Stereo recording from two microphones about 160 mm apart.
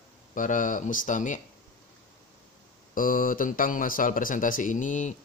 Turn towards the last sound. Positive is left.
turn(degrees=50)  # may be behind; listen again after turning